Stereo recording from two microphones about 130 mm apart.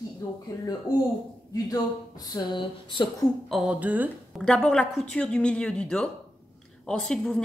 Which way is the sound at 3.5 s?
5° right (ahead or behind).